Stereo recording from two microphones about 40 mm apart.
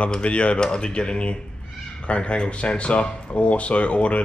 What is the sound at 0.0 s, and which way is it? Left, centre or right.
Speech, left.